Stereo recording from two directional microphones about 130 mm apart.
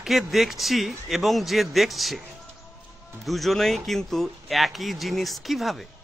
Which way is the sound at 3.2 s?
Centre (ahead or behind).